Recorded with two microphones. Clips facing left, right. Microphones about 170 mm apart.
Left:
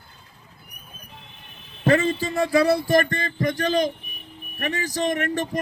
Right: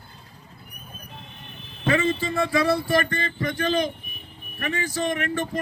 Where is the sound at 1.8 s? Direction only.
40° left (ahead or behind).